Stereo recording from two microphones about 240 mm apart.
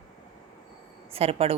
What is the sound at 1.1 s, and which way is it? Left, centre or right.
Speech, right.